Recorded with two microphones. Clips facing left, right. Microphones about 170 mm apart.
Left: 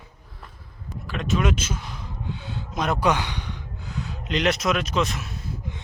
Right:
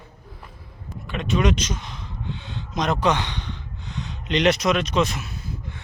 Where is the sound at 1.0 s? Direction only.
Centre (ahead or behind).